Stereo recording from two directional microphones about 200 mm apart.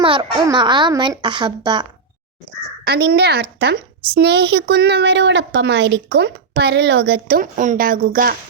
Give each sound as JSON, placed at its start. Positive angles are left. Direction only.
{"t": 0.0, "sound": "a child's voice", "side_deg": -25}
{"t": 2.8, "sound": "a woman's voice", "side_deg": -50}